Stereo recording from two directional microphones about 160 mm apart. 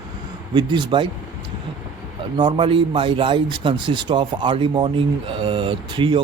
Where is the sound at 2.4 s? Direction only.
30° right (ahead or behind).